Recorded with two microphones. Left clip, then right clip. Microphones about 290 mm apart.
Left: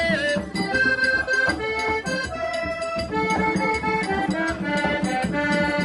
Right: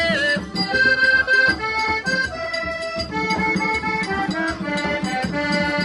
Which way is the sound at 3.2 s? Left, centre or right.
Right.